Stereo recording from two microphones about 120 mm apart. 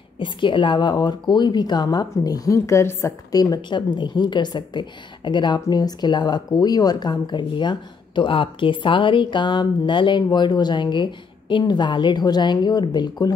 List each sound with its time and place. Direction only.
0.2 s speech: 45° left (ahead or behind)